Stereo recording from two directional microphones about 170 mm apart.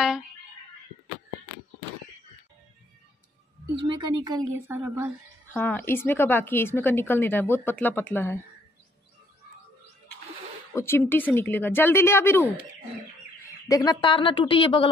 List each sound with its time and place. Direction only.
3.8 s speech: 25° right (ahead or behind)
4.6 s speech: 15° right (ahead or behind)
5.5 s a woman's voice: 10° left (ahead or behind)
10.7 s a woman's voice: 15° left (ahead or behind)
13.7 s a woman's voice: 20° left (ahead or behind)